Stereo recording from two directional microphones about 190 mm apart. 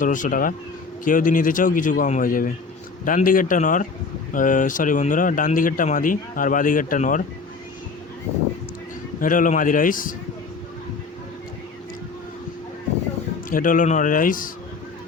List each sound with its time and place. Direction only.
0.0 s speech: 45° left (ahead or behind)
9.2 s speech: 45° left (ahead or behind)
13.5 s speech: 45° left (ahead or behind)